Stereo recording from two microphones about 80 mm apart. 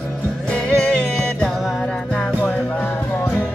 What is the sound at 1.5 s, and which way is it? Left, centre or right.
Music, centre.